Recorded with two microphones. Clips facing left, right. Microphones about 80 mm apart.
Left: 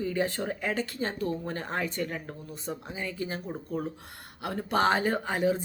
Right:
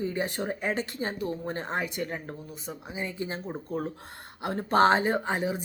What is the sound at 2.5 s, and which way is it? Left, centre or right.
Speech, centre.